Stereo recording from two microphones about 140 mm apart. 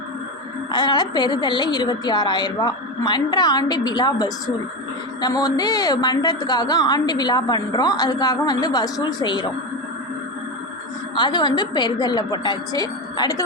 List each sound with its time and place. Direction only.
0.7 s a woman's voice: 30° left (ahead or behind)
11.1 s a woman's voice: 30° left (ahead or behind)